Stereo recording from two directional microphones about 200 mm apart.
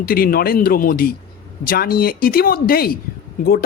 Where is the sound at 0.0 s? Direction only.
45° left (ahead or behind).